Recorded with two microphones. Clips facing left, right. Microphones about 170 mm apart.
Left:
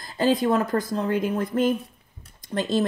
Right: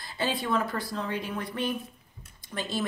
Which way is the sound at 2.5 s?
35° left (ahead or behind).